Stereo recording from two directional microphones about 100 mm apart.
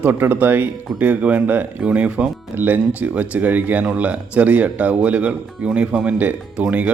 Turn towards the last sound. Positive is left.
turn(degrees=-15)  # may be behind; listen again after turning